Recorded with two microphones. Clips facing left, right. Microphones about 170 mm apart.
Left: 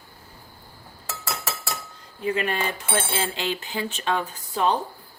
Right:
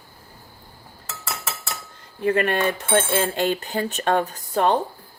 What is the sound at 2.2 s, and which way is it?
Cutlery, 55° right (ahead or behind).